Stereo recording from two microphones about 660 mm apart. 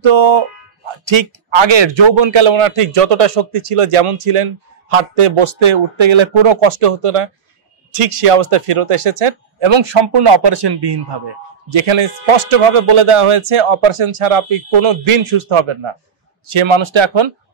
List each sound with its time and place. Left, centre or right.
0.0 s speech: right